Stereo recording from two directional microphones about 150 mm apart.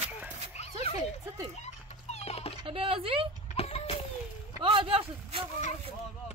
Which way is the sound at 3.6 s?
40° left (ahead or behind).